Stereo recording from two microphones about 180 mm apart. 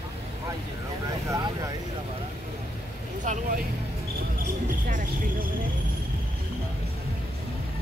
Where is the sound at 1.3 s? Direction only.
20° right (ahead or behind).